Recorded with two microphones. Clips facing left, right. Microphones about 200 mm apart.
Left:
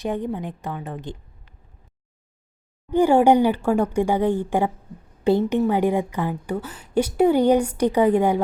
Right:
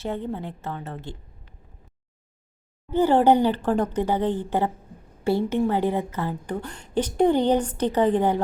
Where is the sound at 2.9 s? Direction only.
10° left (ahead or behind).